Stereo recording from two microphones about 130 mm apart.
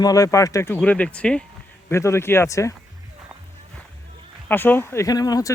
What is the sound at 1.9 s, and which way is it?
Speech, 20° left (ahead or behind).